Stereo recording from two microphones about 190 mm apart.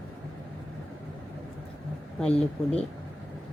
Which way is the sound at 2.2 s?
5° left (ahead or behind).